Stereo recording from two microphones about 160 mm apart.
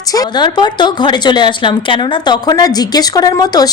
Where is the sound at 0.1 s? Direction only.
25° left (ahead or behind).